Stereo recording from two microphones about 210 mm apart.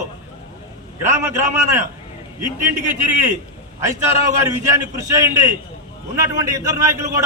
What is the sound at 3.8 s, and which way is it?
A man's voice, 15° right (ahead or behind).